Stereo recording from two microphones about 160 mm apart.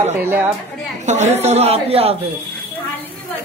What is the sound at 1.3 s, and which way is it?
Speech, 40° right (ahead or behind).